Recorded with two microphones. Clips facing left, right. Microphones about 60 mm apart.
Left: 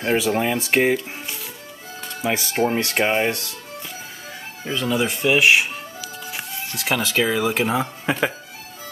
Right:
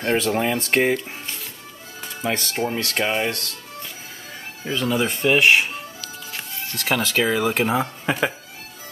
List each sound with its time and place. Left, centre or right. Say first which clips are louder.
0.0 s speech: left 1 dB; centre
2.2 s speech: left 1 dB; centre
2.5 s speech: left 4 dB; left
4.6 s speech: even; centre